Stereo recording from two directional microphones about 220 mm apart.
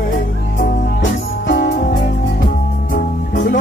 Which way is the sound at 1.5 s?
50° left (ahead or behind).